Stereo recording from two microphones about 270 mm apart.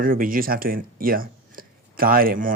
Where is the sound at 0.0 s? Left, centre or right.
Right.